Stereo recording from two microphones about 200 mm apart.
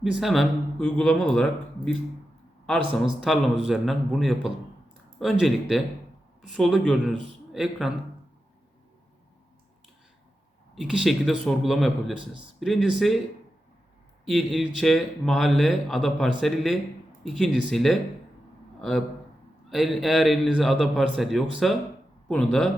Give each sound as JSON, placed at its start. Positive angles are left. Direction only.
{"t": 0.0, "sound": "speech", "side_deg": 0}
{"t": 10.8, "sound": "speech", "side_deg": -5}
{"t": 14.3, "sound": "a man's voice", "side_deg": 0}